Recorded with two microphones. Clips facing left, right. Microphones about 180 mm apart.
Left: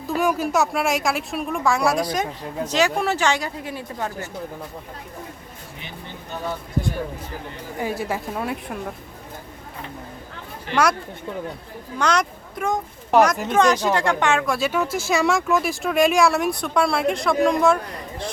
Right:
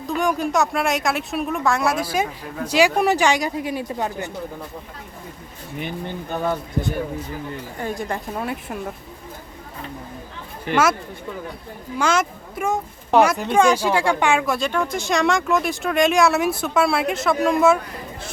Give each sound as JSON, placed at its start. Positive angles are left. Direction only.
{"t": 0.1, "sound": "speech", "side_deg": 5}
{"t": 6.3, "sound": "speech", "side_deg": -55}
{"t": 7.8, "sound": "speech", "side_deg": 5}
{"t": 11.9, "sound": "speech", "side_deg": -5}
{"t": 14.5, "sound": "speech", "side_deg": 5}